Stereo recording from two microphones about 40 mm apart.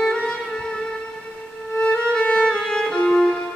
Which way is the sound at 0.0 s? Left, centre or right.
Left.